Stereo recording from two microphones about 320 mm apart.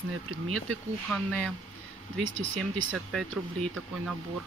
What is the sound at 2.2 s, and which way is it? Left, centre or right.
Speech, right.